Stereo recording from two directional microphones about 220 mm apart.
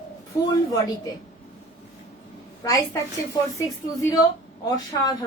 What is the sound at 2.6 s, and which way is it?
Speech, 15° left (ahead or behind).